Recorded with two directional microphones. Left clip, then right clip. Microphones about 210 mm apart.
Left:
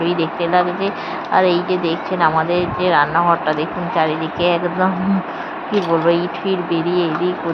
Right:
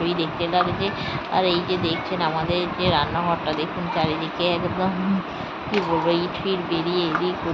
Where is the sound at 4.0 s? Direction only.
15° left (ahead or behind).